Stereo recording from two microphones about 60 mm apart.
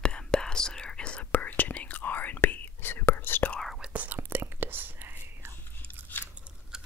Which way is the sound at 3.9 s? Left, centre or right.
Right.